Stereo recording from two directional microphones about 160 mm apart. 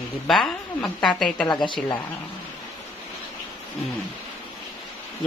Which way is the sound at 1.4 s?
30° left (ahead or behind).